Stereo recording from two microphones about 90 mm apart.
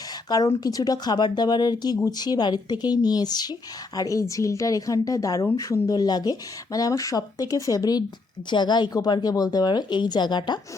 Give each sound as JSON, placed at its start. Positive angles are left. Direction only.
{"t": 0.3, "sound": "a woman's voice", "side_deg": 45}
{"t": 5.9, "sound": "speech", "side_deg": 45}